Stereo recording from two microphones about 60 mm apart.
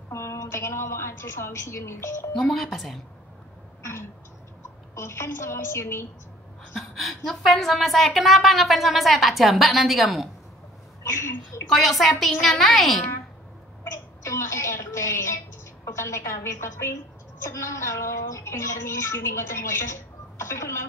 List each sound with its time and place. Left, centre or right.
0.1 s a sound: left
2.3 s a woman's voice: centre
3.8 s throat clearing: left
4.9 s a woman's voice: left
6.7 s a woman's voice: centre
11.1 s a sound: left
11.7 s a woman's voice: centre
13.8 s a sound: left
15.8 s a woman's voice: left